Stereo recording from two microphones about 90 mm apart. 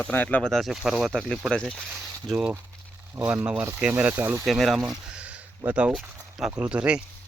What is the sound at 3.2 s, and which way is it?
Speech, 25° right (ahead or behind).